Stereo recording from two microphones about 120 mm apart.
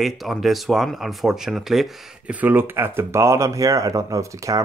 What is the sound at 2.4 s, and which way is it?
Speech, 15° right (ahead or behind).